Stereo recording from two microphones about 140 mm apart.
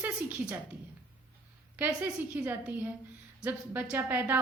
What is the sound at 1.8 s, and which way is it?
A woman's voice, 10° right (ahead or behind).